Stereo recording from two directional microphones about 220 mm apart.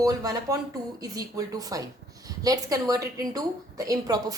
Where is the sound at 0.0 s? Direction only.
15° right (ahead or behind).